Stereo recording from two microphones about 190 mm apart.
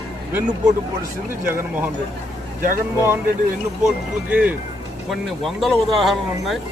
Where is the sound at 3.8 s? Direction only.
5° right (ahead or behind).